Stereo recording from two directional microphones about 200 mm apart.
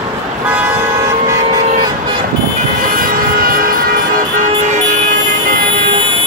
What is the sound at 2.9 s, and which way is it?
Vehicle, 45° right (ahead or behind).